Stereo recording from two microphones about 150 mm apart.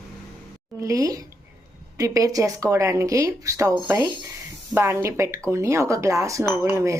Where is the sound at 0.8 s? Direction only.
20° right (ahead or behind).